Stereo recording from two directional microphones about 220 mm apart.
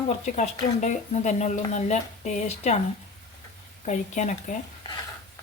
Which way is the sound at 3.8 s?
35° left (ahead or behind).